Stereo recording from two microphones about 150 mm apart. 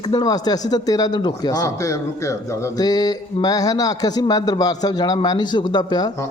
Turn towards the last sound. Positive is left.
turn(degrees=25)  # may be behind; listen again after turning